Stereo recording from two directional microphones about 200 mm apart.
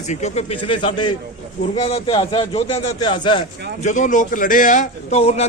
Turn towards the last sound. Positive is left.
turn(degrees=30)  # may be behind; listen again after turning